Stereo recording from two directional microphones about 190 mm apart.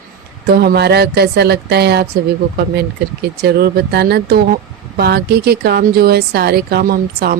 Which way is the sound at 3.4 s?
55° right (ahead or behind).